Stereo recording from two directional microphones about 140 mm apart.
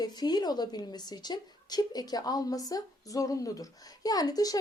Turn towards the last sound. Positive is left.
turn(degrees=25)  # may be behind; listen again after turning